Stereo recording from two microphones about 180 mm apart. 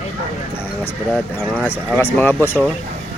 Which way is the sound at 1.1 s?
10° left (ahead or behind).